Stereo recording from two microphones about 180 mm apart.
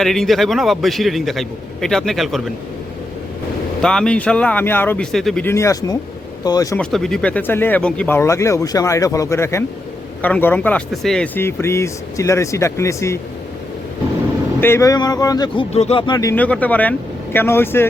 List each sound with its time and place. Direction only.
0.0 s a man's voice: centre (ahead or behind)
3.8 s speech: 5° left (ahead or behind); by 6.7 s 20° left (ahead or behind)
6.7 s speech: 5° left (ahead or behind)
14.6 s speech: 15° left (ahead or behind)
15.7 s speech: 35° left (ahead or behind)
16.3 s speech: 10° left (ahead or behind)